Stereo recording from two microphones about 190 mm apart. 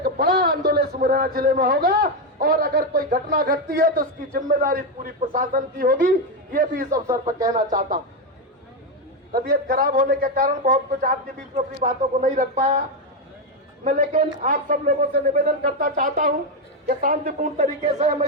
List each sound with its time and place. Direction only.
0.0 s a sound: 50° right (ahead or behind)
0.7 s a man's voice: 50° right (ahead or behind)
9.3 s a man's voice: 55° right (ahead or behind)
13.8 s a man's voice: 40° right (ahead or behind)